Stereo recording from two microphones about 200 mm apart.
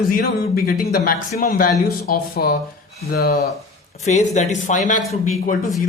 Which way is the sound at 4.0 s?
35° left (ahead or behind).